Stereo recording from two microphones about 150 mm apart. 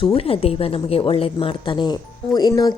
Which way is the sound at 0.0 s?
40° left (ahead or behind).